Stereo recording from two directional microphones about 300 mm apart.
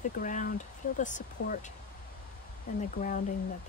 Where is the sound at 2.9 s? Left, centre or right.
Left.